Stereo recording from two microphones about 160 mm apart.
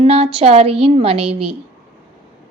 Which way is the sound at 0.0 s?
40° right (ahead or behind).